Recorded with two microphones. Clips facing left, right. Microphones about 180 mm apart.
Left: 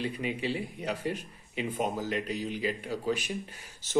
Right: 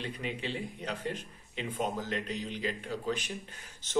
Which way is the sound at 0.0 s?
10° left (ahead or behind).